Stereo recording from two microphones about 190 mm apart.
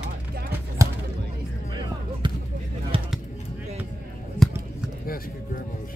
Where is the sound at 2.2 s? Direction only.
25° right (ahead or behind).